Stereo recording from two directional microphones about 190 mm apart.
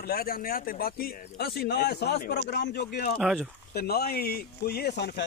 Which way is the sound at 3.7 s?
55° left (ahead or behind).